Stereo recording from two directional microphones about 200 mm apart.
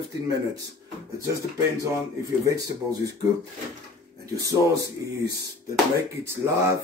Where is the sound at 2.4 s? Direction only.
15° right (ahead or behind).